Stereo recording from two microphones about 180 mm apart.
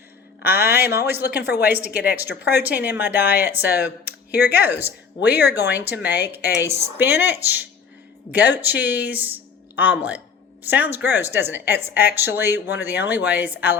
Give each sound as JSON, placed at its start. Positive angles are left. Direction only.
{"t": 0.4, "sound": "speech", "side_deg": -10}
{"t": 1.4, "sound": "speech", "side_deg": 65}
{"t": 1.6, "sound": "speech", "side_deg": -10}
{"t": 2.4, "sound": "speech", "side_deg": 65}
{"t": 2.6, "sound": "speech", "side_deg": -10}
{"t": 4.4, "sound": "speech", "side_deg": 65}
{"t": 4.6, "sound": "speech", "side_deg": -10}